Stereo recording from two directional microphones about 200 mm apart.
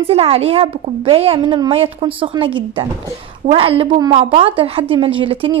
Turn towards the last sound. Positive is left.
turn(degrees=-25)  # may be behind; listen again after turning